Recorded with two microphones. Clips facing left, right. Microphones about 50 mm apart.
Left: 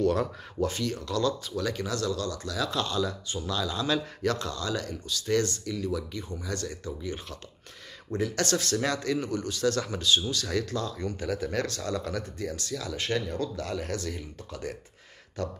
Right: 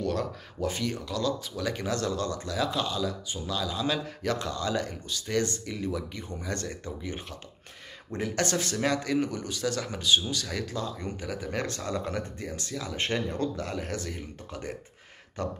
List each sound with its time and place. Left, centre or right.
0.0 s speech: centre
0.6 s speech: centre
1.1 s speech: centre
1.6 s speech: right
2.8 s speech: centre
11.6 s speech: right